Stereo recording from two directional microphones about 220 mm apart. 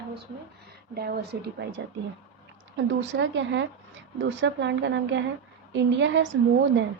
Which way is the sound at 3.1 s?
55° right (ahead or behind).